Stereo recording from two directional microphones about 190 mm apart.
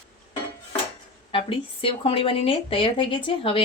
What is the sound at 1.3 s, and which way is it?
Speech, 30° left (ahead or behind).